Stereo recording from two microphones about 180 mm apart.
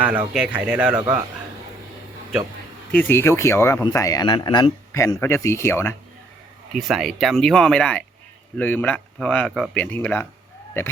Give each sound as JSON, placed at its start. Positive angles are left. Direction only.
{"t": 0.0, "sound": "a man's voice", "side_deg": -10}
{"t": 2.9, "sound": "speech", "side_deg": 10}
{"t": 6.7, "sound": "speech", "side_deg": 0}